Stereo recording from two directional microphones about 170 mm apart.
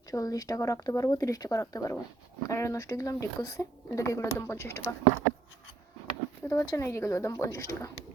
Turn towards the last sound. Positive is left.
turn(degrees=15)  # may be behind; listen again after turning